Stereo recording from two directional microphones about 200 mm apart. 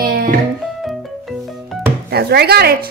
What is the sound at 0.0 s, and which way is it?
Music, 50° right (ahead or behind).